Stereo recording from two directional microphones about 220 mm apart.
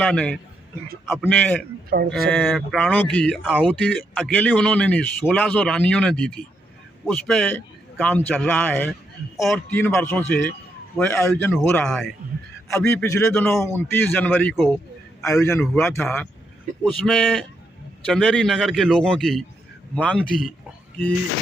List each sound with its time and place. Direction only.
0.0 s a man's voice: 5° left (ahead or behind)
1.9 s speech: 40° right (ahead or behind)
2.3 s a man's voice: centre (ahead or behind)